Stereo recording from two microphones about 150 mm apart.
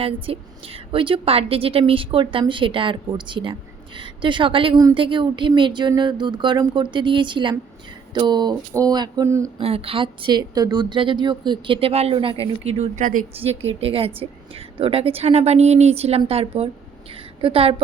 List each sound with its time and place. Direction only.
0.0 s a woman's voice: 40° right (ahead or behind)
8.1 s a sound: 30° right (ahead or behind)
9.6 s a woman's voice: 40° right (ahead or behind); by 13.2 s 60° right (ahead or behind)
13.3 s a woman's voice: 40° right (ahead or behind)